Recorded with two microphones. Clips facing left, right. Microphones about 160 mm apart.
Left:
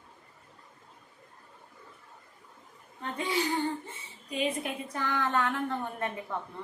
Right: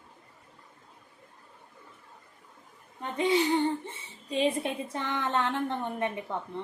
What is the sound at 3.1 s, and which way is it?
A woman's voice, 20° right (ahead or behind).